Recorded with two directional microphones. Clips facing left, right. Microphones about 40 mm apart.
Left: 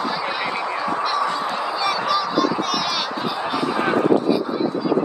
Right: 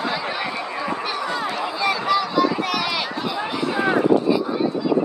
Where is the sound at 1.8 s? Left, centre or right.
Right.